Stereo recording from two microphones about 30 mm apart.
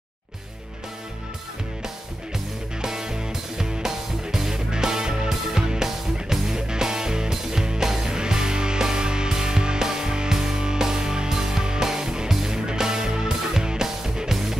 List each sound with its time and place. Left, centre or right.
2.8 s music: right